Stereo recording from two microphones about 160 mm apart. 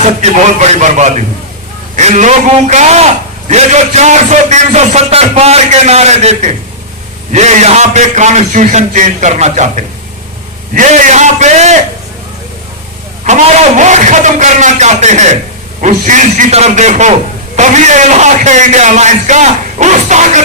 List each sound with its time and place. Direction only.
0.0 s speech: 45° right (ahead or behind)
13.2 s speech: 45° right (ahead or behind)